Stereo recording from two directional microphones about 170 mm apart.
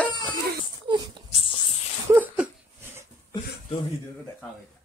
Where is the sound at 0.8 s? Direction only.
25° right (ahead or behind).